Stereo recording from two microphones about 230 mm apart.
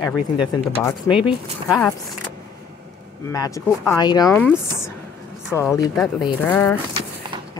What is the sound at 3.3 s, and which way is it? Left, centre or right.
Speech, centre.